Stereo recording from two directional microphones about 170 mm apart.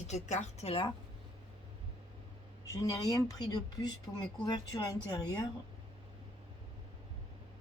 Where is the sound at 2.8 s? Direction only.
20° left (ahead or behind).